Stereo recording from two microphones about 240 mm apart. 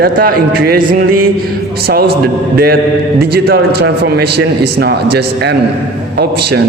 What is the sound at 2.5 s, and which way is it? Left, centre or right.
A man's voice, right.